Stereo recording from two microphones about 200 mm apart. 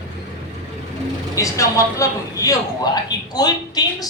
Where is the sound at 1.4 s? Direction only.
15° left (ahead or behind).